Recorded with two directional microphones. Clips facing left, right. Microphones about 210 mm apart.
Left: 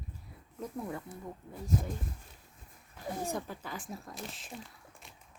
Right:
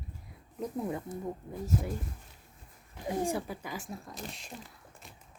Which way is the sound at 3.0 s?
10° right (ahead or behind).